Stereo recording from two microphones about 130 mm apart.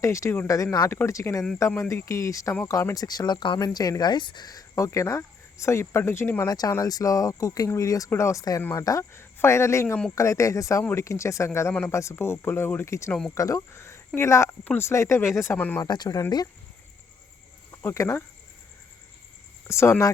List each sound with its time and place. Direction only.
0.0 s speech: 25° left (ahead or behind)
15.8 s speech: 30° left (ahead or behind)
17.7 s a sound: 25° left (ahead or behind)
19.6 s speech: 20° left (ahead or behind)